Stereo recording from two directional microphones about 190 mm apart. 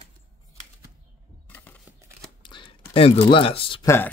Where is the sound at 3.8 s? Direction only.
15° left (ahead or behind).